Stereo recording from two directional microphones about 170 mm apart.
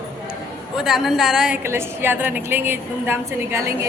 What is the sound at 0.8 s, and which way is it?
A woman's voice, centre (ahead or behind).